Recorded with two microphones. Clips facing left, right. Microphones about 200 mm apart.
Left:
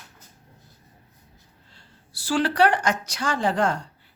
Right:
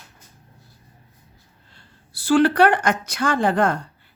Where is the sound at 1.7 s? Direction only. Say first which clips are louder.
Right 2 dB; 55° right (ahead or behind).